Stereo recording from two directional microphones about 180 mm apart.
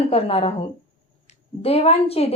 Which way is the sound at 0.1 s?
35° left (ahead or behind).